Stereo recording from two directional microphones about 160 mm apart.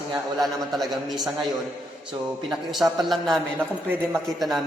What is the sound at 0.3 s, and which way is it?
Speech, centre (ahead or behind).